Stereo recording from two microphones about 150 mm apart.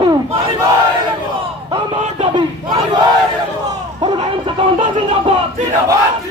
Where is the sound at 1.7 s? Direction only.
35° right (ahead or behind).